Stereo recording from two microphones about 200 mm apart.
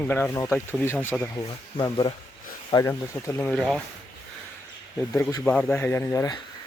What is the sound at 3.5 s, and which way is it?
Speech, centre (ahead or behind).